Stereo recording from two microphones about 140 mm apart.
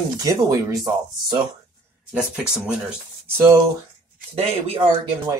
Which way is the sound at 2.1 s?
5° right (ahead or behind).